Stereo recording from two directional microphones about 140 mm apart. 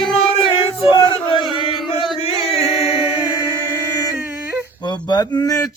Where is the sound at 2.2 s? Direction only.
45° left (ahead or behind).